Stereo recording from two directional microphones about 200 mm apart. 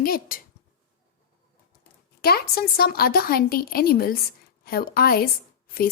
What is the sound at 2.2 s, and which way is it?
Speech, 50° left (ahead or behind).